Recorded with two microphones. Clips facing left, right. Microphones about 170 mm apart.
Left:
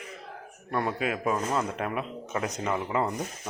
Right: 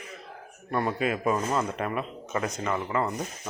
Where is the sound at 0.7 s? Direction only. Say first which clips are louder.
Right 2 dB; centre (ahead or behind).